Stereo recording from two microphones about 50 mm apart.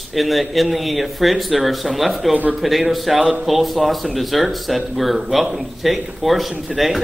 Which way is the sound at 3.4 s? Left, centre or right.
Centre.